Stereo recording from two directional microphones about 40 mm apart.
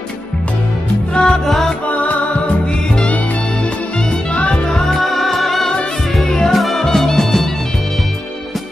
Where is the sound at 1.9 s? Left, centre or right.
Left.